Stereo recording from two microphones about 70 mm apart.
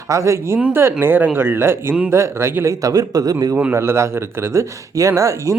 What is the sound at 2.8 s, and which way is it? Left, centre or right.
Speech, right.